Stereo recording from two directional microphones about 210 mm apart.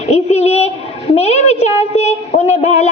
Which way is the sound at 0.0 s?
35° left (ahead or behind).